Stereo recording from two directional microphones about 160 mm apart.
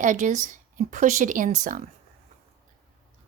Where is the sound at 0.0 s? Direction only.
50° right (ahead or behind).